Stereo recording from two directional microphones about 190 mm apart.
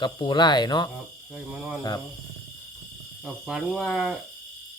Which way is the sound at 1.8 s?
15° left (ahead or behind).